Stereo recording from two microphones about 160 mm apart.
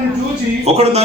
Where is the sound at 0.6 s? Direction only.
40° right (ahead or behind).